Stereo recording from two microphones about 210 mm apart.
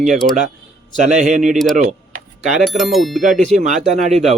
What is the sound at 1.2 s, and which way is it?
Speech, 40° right (ahead or behind).